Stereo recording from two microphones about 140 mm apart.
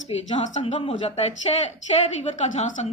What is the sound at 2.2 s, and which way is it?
Speech, 55° left (ahead or behind).